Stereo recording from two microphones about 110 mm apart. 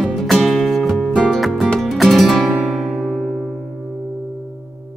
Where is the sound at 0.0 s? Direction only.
Centre (ahead or behind).